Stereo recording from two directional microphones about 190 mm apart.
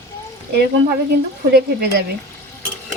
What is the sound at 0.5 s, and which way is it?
Speech, 60° right (ahead or behind).